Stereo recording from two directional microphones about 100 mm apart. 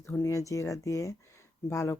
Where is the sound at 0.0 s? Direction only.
25° left (ahead or behind).